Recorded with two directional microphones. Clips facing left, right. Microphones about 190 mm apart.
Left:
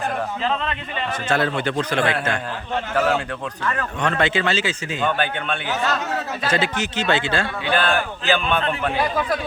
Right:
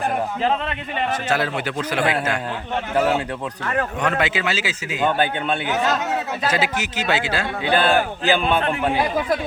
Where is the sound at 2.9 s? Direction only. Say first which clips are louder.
Right 1 dB; 20° right (ahead or behind).